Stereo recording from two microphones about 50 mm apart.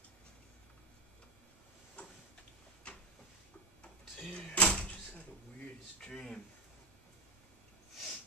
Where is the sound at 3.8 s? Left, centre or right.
Left.